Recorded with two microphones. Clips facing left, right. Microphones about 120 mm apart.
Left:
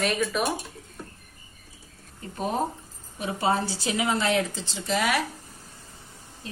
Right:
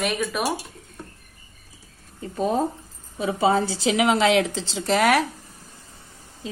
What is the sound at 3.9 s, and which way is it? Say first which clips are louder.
Speech: right 6 dB; 90° right.